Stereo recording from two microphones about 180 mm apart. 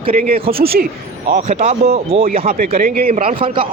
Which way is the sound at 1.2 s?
35° right (ahead or behind).